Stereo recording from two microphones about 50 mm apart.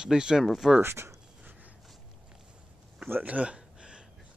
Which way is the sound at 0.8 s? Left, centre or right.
Right.